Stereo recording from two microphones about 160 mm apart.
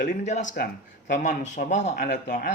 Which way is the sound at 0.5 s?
80° left.